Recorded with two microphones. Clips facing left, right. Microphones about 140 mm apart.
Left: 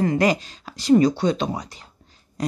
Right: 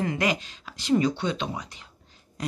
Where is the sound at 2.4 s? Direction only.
40° left (ahead or behind).